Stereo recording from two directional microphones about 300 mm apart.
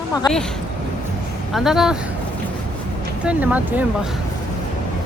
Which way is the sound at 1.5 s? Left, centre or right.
Centre.